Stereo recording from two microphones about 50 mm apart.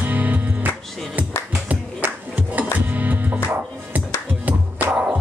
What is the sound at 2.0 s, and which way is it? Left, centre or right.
Music, right.